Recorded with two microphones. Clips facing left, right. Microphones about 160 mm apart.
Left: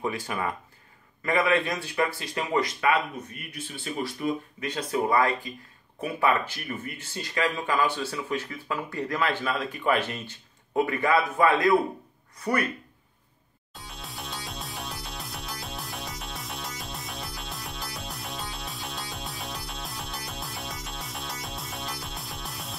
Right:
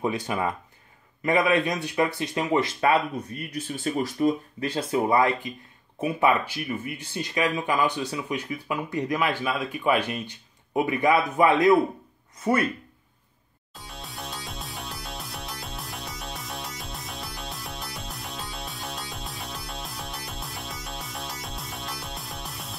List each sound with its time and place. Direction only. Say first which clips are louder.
0.0 s speech: right 3 dB; 20° right (ahead or behind)
13.7 s music: right 1 dB; centre (ahead or behind)